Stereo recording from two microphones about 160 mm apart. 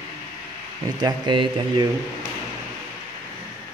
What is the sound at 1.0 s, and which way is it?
Speech, 30° right (ahead or behind).